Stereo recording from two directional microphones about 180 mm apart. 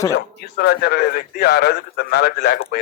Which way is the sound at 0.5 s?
65° left (ahead or behind).